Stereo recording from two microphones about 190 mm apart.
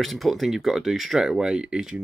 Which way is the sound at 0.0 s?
Centre (ahead or behind).